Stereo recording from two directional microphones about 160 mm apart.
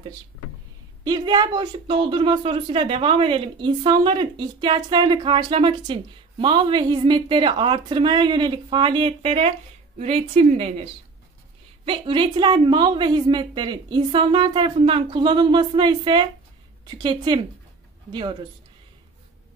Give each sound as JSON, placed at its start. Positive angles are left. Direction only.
{"t": 1.0, "sound": "a woman's voice", "side_deg": -25}